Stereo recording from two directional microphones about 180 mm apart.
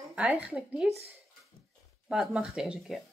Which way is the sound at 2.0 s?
Centre (ahead or behind).